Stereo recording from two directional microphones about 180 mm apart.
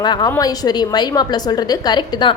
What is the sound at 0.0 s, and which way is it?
A woman's voice, 25° left (ahead or behind).